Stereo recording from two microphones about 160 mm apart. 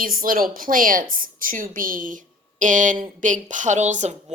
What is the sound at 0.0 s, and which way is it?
A woman's voice, 60° right (ahead or behind).